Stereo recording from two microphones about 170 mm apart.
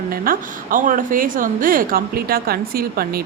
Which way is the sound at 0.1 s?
55° right (ahead or behind).